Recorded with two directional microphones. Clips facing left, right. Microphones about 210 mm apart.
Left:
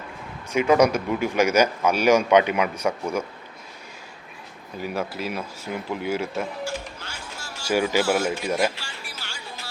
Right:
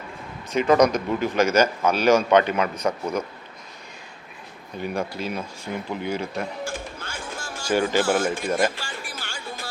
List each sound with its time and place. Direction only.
0.5 s a man's voice: 10° left (ahead or behind)
4.8 s speech: 5° left (ahead or behind)
6.7 s a sound: 50° right (ahead or behind)
7.9 s speech: 50° right (ahead or behind)
8.2 s music: 50° right (ahead or behind)